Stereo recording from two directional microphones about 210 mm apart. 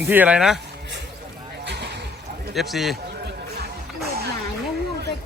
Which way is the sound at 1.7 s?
55° right (ahead or behind).